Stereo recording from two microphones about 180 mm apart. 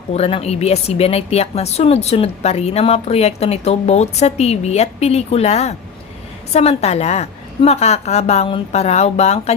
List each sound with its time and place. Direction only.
0.1 s a woman's voice: 35° left (ahead or behind)